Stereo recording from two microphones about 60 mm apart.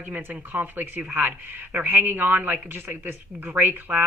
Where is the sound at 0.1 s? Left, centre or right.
Right.